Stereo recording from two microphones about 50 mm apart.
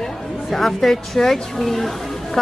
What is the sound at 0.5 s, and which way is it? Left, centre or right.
A woman's voice, centre.